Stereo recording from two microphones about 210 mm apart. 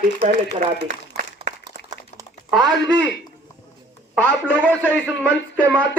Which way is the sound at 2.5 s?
Centre (ahead or behind).